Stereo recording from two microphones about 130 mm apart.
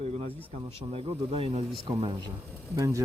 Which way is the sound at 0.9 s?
45° right (ahead or behind).